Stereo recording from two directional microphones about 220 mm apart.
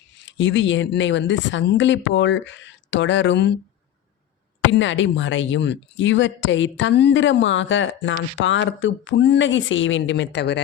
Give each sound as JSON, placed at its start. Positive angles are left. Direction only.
{"t": 0.2, "sound": "speech", "side_deg": 55}
{"t": 4.7, "sound": "speech", "side_deg": 55}